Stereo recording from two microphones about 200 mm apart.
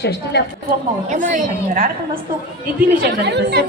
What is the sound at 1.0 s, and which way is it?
Speech, 40° right (ahead or behind).